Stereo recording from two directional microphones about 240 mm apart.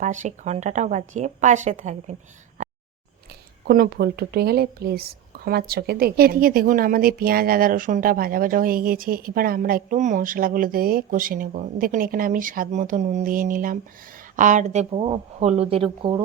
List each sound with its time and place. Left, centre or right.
0.0 s a woman's voice: right
2.6 s a sound: right
3.7 s a woman's voice: right